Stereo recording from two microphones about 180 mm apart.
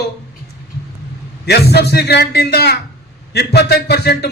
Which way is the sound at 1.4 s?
65° left (ahead or behind).